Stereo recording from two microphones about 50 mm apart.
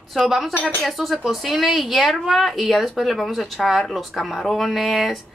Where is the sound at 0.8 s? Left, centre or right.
Centre.